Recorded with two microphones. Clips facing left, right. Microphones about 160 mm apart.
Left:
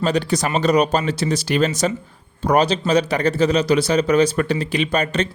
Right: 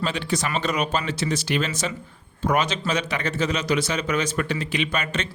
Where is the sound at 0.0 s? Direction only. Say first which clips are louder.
Left 6 dB; 40° left (ahead or behind).